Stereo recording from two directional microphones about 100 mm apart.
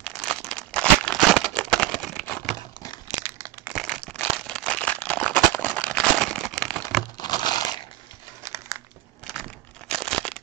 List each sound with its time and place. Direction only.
0.0 s crumpling: 5° left (ahead or behind)
4.2 s a sound: 10° left (ahead or behind)
7.2 s crushing: 45° left (ahead or behind)
8.4 s crumpling: 30° right (ahead or behind)
9.3 s crumpling: 5° left (ahead or behind)